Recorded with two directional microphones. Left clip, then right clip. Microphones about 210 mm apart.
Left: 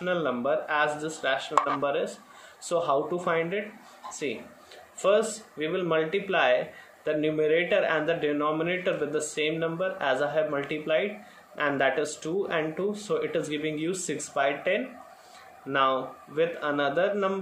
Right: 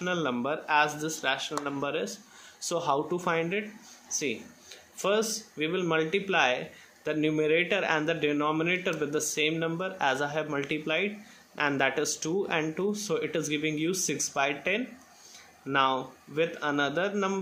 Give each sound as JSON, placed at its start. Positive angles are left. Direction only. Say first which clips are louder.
{"t": 0.0, "sound": "a man's voice", "louder": "left 3 dB", "side_deg": -25}
{"t": 4.9, "sound": "a man's voice", "louder": "left 4 dB", "side_deg": -25}